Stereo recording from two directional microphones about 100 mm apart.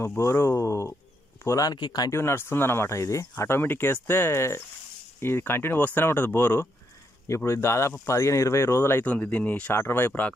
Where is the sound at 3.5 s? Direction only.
20° left (ahead or behind).